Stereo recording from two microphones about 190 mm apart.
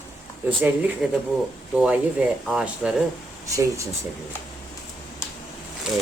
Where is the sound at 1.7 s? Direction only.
5° right (ahead or behind).